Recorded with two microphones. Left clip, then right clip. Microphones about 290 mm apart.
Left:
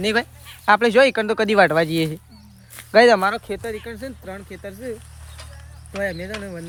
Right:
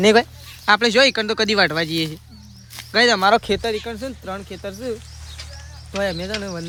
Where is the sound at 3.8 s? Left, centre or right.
Centre.